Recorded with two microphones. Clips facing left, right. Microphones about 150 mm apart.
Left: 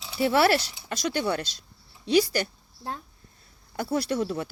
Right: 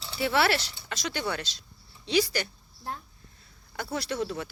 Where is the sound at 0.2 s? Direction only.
45° left (ahead or behind).